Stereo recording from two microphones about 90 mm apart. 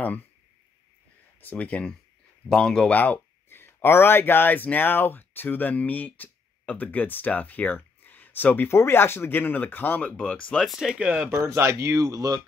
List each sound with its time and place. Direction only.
1.4 s speech: 15° left (ahead or behind)
3.0 s speech: 20° left (ahead or behind)
11.0 s speech: 15° right (ahead or behind); by 12.4 s 40° right (ahead or behind)